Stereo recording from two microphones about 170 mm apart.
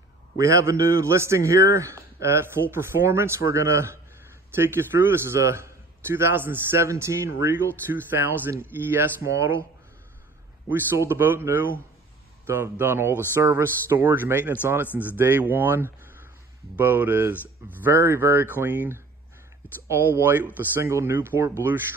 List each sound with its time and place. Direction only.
0.4 s a man's voice: 15° right (ahead or behind)
10.7 s a man's voice: 15° right (ahead or behind)